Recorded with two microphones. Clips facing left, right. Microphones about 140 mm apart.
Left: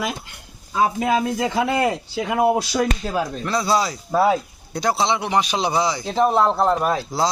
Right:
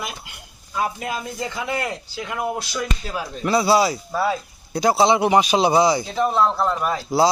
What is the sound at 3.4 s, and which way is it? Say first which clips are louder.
Speech: right 6 dB; 10° right (ahead or behind).